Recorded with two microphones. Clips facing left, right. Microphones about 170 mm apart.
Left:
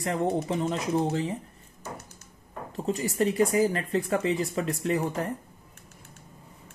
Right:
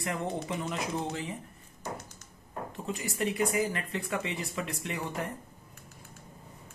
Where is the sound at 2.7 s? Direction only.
35° left (ahead or behind).